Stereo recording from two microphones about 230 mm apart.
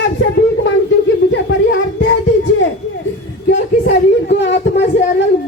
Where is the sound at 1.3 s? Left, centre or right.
Left.